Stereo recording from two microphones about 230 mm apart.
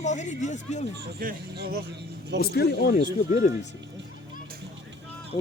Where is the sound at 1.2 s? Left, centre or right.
Right.